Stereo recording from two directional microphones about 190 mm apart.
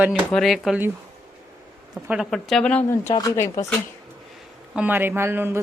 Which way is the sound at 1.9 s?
5° right (ahead or behind).